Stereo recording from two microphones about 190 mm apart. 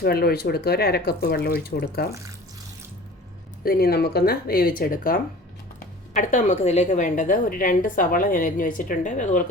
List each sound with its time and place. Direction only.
0.0 s speech: 55° left (ahead or behind)
3.6 s a woman's voice: 55° left (ahead or behind)